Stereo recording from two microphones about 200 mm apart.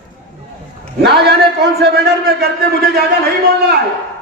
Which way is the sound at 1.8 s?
50° right (ahead or behind).